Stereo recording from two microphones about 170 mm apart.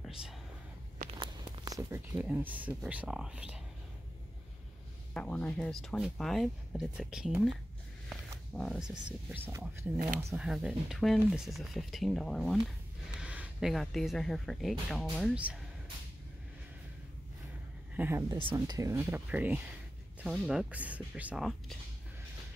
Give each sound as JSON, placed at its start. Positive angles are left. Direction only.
{"t": 1.6, "sound": "a sound", "side_deg": -20}
{"t": 2.1, "sound": "speech", "side_deg": -5}
{"t": 5.1, "sound": "speech", "side_deg": 10}
{"t": 8.5, "sound": "speech", "side_deg": 0}
{"t": 9.5, "sound": "speech", "side_deg": -15}
{"t": 10.0, "sound": "speech", "side_deg": -5}
{"t": 17.9, "sound": "speech", "side_deg": -15}
{"t": 18.4, "sound": "speech", "side_deg": -30}
{"t": 18.8, "sound": "speech", "side_deg": -15}